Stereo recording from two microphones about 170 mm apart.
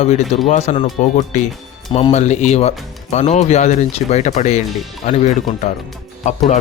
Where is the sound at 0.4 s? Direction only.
45° left (ahead or behind).